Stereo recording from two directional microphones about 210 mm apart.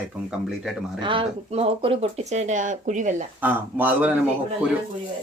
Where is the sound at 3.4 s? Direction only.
10° right (ahead or behind).